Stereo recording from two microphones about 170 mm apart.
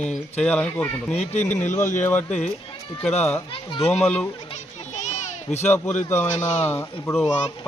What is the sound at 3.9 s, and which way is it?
Speech, 5° left (ahead or behind).